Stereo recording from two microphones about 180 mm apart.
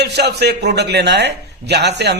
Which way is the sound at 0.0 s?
65° right (ahead or behind).